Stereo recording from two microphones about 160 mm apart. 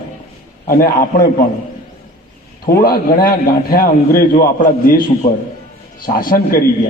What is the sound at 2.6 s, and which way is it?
A man's voice, 70° left (ahead or behind).